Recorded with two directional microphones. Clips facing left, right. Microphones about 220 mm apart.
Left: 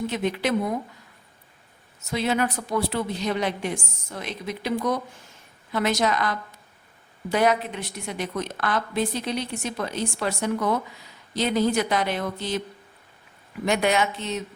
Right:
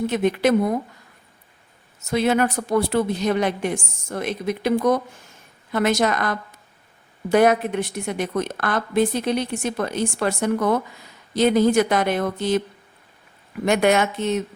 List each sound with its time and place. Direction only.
0.1 s a woman's voice: 50° right (ahead or behind)
2.0 s a woman's voice: 50° right (ahead or behind)
13.7 s a woman's voice: 50° right (ahead or behind)